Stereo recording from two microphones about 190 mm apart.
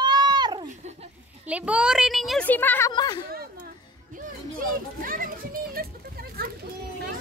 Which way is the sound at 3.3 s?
55° right (ahead or behind).